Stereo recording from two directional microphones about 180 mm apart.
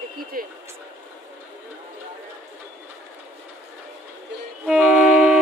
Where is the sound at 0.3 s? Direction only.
55° right (ahead or behind).